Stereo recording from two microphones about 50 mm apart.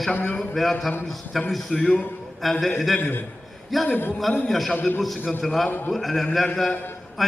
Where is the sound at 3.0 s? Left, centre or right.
Left.